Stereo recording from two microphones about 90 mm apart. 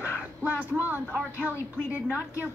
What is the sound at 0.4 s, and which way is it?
A woman's voice, 20° right (ahead or behind).